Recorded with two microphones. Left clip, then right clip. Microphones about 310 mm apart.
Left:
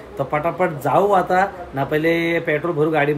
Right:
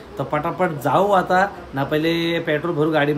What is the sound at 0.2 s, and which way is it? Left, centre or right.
Speech, centre.